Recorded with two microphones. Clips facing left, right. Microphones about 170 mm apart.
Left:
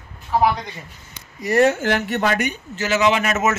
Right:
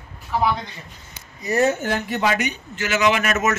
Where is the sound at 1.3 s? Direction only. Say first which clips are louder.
Left 3 dB; 85° left.